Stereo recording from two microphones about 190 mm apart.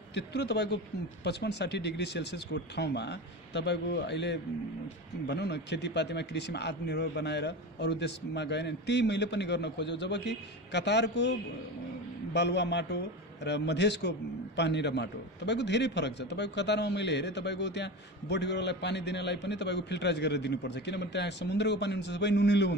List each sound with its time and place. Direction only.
0.1 s a man's voice: 65° left (ahead or behind)
12.4 s a man's voice: 65° left (ahead or behind)